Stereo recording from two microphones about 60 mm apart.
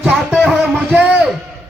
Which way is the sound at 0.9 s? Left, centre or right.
Right.